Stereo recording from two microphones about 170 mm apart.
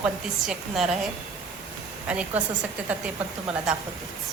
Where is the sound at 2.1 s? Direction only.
10° right (ahead or behind).